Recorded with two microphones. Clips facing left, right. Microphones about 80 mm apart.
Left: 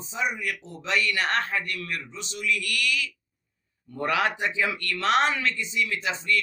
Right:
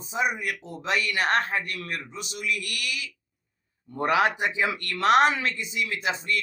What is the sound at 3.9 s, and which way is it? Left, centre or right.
Speech, centre.